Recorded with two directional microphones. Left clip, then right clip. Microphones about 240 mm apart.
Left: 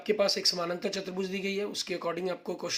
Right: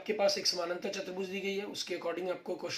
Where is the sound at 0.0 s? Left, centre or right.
Left.